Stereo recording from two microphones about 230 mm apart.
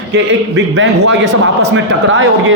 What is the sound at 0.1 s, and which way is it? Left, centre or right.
A man's voice, right.